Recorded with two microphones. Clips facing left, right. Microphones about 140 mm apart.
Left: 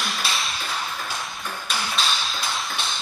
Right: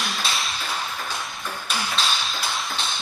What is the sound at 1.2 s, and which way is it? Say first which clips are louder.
Ping: even; centre (ahead or behind).